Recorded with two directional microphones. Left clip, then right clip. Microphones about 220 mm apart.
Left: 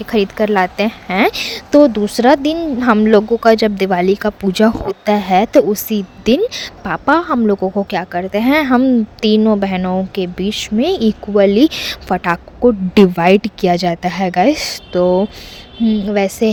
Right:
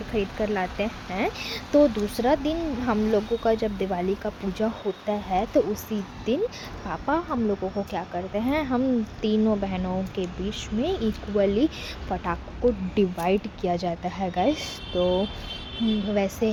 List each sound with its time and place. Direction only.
0.1 s a woman's voice: 55° left (ahead or behind)